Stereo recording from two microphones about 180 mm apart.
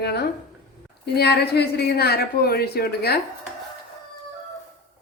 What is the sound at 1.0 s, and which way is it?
A woman's voice, 65° left (ahead or behind).